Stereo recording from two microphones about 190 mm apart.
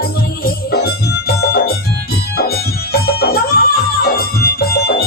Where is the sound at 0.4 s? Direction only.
55° left (ahead or behind).